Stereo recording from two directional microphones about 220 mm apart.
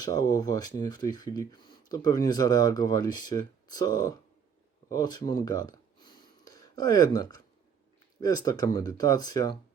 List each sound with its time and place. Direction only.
0.0 s speech: 15° left (ahead or behind)
4.9 s a sound: 15° left (ahead or behind)
8.2 s speech: 20° left (ahead or behind)